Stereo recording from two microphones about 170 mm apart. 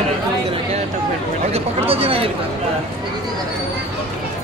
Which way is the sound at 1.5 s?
35° right (ahead or behind).